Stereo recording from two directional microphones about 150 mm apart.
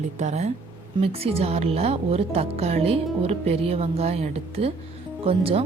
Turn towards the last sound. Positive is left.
turn(degrees=-40)  # may be behind; listen again after turning